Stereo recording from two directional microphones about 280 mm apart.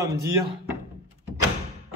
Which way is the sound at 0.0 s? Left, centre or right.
Centre.